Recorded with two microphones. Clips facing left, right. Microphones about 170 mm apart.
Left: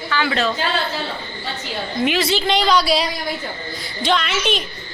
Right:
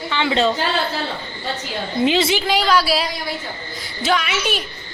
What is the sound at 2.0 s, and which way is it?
Speech, 25° right (ahead or behind).